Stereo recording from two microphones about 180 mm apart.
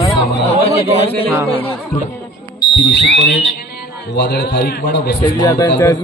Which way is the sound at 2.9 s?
70° left (ahead or behind).